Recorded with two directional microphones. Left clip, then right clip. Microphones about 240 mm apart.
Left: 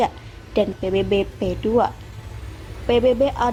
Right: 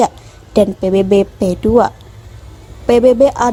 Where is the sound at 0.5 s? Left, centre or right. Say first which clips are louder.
Right 8 dB; right.